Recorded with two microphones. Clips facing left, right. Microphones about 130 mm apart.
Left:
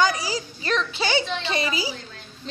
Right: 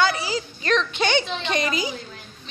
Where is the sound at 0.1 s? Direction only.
40° left (ahead or behind).